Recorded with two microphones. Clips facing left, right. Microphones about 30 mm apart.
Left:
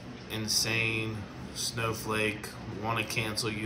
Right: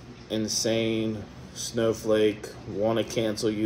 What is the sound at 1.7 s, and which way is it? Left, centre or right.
Speech, left.